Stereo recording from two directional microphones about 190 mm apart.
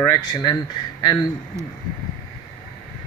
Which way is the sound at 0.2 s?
20° left (ahead or behind).